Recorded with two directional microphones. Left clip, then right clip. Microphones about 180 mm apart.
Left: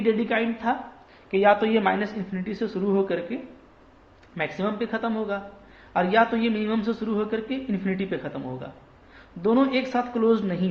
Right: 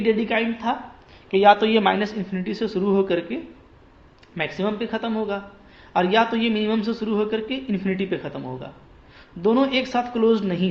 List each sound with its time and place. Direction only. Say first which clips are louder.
0.0 s a man's voice: right 2 dB; 20° right (ahead or behind)